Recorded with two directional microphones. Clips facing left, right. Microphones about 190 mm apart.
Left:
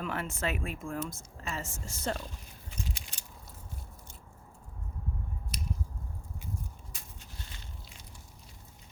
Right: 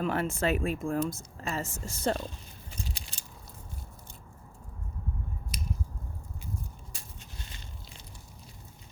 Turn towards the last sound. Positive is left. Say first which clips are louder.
# right 1 dB
turn(degrees=-20)  # may be behind; listen again after turning